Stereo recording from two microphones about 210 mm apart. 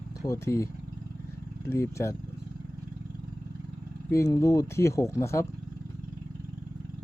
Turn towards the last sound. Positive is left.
turn(degrees=15)  # may be behind; listen again after turning